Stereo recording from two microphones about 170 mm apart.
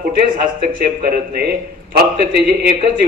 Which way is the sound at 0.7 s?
55° right (ahead or behind).